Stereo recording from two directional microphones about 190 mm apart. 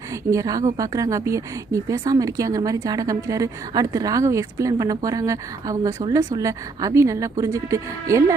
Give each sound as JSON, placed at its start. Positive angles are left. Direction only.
{"t": 0.1, "sound": "speech", "side_deg": -15}